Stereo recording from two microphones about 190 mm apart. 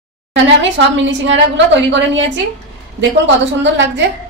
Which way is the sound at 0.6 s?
75° right (ahead or behind).